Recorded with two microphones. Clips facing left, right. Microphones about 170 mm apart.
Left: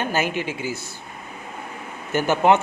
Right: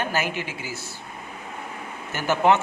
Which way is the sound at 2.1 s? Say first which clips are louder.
Left 3 dB; 15° left (ahead or behind).